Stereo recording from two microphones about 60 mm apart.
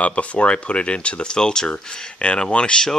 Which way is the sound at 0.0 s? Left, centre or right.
Left.